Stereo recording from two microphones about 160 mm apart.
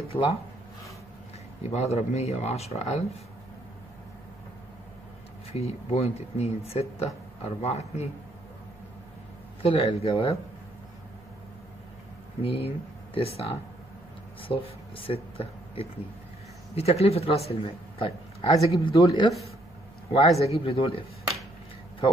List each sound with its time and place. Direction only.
0.1 s speech: 35° left (ahead or behind)
1.7 s speech: 40° left (ahead or behind)
5.5 s speech: 40° left (ahead or behind)
9.6 s speech: 40° left (ahead or behind)
12.4 s speech: 35° left (ahead or behind)
18.9 s speech: 25° left (ahead or behind)
20.1 s speech: 40° left (ahead or behind)